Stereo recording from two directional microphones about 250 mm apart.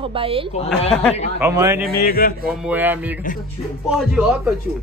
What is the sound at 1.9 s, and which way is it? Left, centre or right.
Speech, left.